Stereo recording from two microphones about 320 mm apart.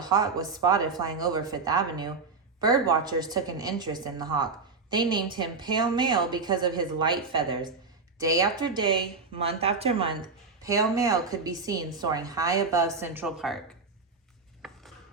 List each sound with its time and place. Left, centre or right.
0.0 s speech: centre
14.6 s chopping: centre